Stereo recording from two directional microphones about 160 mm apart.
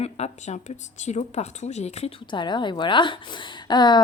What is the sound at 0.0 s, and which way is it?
Speech, 45° left (ahead or behind).